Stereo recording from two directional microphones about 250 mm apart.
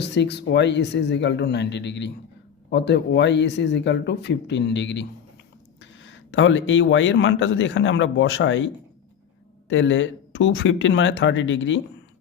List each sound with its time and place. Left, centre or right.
0.0 s speech: left